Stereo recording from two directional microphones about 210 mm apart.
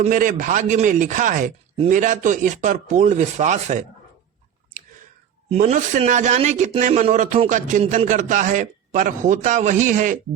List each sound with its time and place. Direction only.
0.0 s speech: 40° right (ahead or behind)
5.5 s speech: 30° right (ahead or behind)